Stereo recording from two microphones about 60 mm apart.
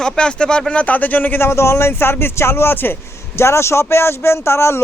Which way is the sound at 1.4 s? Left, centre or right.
Left.